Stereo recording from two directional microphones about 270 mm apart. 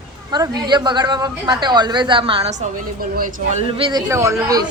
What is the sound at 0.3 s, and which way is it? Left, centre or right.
A woman's voice, centre.